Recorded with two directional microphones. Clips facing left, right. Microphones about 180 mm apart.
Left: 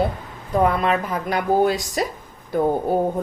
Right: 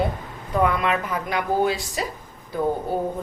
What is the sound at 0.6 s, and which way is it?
Speech, 35° left (ahead or behind).